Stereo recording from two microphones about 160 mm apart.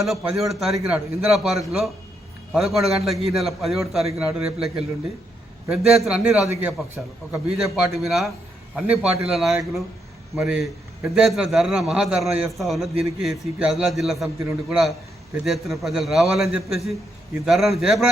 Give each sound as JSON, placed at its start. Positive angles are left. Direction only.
{"t": 0.1, "sound": "a man's voice", "side_deg": 0}